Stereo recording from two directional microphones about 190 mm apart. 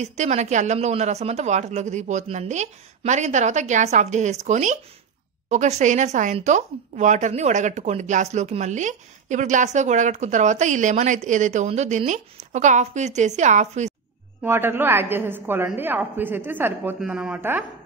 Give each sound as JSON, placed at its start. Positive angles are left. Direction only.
{"t": 0.0, "sound": "a woman's voice", "side_deg": -35}
{"t": 14.4, "sound": "a woman's voice", "side_deg": -10}